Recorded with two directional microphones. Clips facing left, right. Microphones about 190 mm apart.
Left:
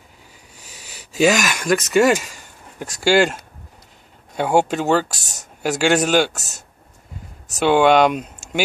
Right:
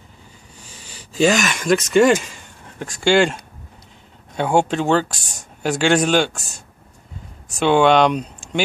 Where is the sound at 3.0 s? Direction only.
5° left (ahead or behind).